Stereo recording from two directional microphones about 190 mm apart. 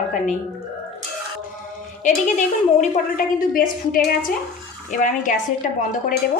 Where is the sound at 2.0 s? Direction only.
40° left (ahead or behind).